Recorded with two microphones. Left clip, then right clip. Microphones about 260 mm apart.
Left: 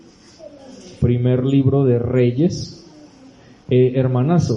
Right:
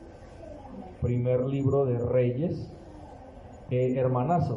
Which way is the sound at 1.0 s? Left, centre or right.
Left.